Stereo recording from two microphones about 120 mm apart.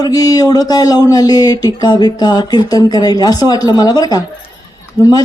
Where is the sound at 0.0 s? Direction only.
30° left (ahead or behind).